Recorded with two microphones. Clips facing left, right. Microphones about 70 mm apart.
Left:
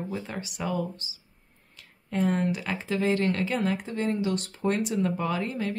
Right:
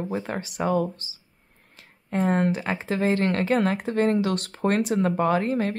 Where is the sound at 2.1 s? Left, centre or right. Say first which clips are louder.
Right 3 dB; right.